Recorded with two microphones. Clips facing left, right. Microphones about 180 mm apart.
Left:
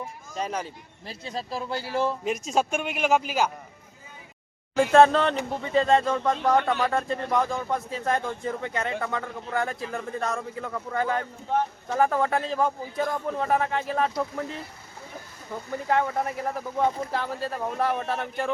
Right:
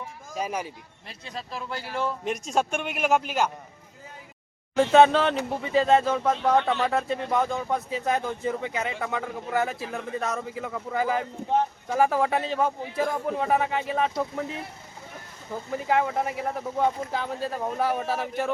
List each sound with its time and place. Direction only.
0.3 s speech: 10° right (ahead or behind)
1.0 s speech: 30° left (ahead or behind)
2.2 s speech: centre (ahead or behind)
4.8 s speech: centre (ahead or behind)
15.7 s speech: 5° right (ahead or behind)